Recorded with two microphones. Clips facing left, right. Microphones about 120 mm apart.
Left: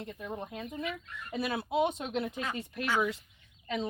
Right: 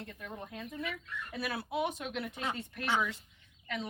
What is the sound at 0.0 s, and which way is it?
Speech, 20° left (ahead or behind).